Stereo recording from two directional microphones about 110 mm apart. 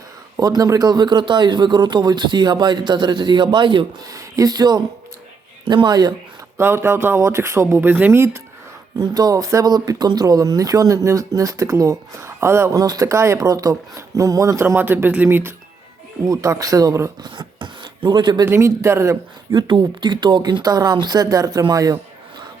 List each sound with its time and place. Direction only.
0.3 s speech: 35° right (ahead or behind)
4.1 s speech: 35° right (ahead or behind)
6.6 s speech: 20° right (ahead or behind)
9.0 s speech: 35° right (ahead or behind); by 15.5 s 20° right (ahead or behind)
16.2 s speech: 30° right (ahead or behind)
17.2 s a sound: 40° right (ahead or behind)
18.4 s speech: 25° right (ahead or behind)
19.5 s speech: 45° right (ahead or behind)